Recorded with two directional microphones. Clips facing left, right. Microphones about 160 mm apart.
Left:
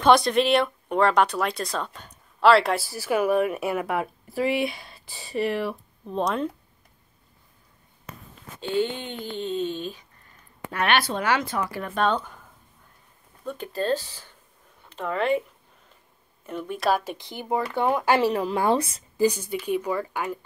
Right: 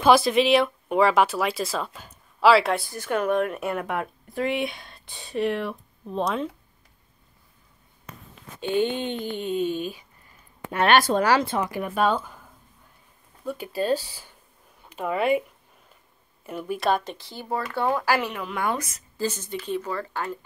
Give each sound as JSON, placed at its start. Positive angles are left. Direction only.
{"t": 0.0, "sound": "speech", "side_deg": -5}
{"t": 8.5, "sound": "speech", "side_deg": -15}
{"t": 10.9, "sound": "speech", "side_deg": -40}
{"t": 13.5, "sound": "speech", "side_deg": -10}
{"t": 16.4, "sound": "speech", "side_deg": -5}
{"t": 17.2, "sound": "speech", "side_deg": 15}
{"t": 19.1, "sound": "speech", "side_deg": 15}